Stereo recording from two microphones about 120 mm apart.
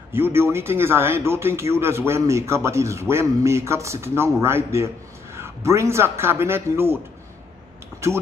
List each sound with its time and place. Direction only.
0.1 s a man's voice: 20° right (ahead or behind)